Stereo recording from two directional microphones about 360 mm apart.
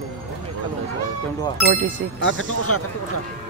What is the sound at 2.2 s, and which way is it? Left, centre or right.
Speech, left.